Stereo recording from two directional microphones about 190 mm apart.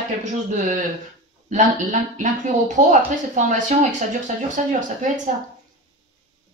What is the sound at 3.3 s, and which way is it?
Speech, 40° right (ahead or behind).